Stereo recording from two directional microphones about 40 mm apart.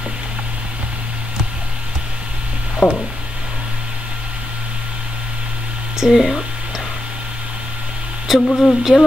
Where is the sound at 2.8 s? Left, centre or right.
Left.